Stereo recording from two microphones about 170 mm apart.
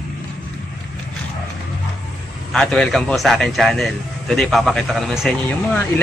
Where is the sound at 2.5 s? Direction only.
5° left (ahead or behind).